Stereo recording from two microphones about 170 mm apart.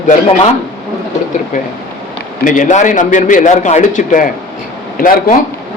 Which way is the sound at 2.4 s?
50° left (ahead or behind).